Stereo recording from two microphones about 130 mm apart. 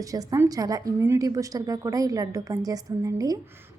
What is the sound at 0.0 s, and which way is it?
A woman's voice, 25° right (ahead or behind).